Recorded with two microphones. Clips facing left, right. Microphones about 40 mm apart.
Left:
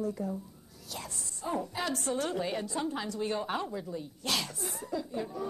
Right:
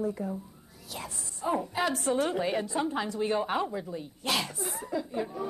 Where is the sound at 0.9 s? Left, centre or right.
Centre.